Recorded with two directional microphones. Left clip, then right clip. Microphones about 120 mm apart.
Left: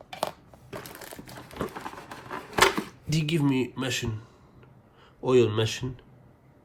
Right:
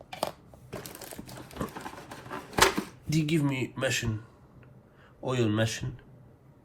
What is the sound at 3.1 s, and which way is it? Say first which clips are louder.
Speech: left 2 dB; 55° left (ahead or behind).